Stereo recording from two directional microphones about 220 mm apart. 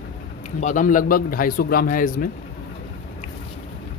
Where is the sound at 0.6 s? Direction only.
35° left (ahead or behind).